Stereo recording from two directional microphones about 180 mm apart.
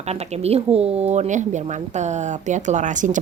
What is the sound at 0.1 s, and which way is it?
Speech, 35° right (ahead or behind).